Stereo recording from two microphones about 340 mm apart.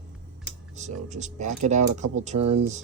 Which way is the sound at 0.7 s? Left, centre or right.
Right.